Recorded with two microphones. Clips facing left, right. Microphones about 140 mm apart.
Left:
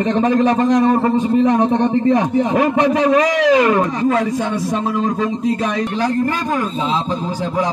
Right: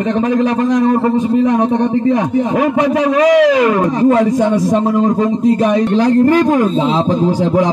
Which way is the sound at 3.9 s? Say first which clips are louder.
Right 6 dB; 30° right (ahead or behind).